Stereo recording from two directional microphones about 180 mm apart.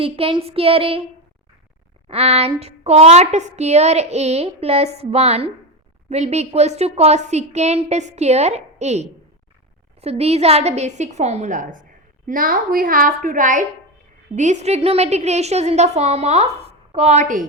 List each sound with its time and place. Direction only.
0.0 s speech: 30° right (ahead or behind)
2.0 s a woman's voice: 35° right (ahead or behind)